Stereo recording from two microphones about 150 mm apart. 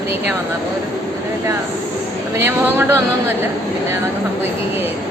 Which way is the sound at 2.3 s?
15° right (ahead or behind).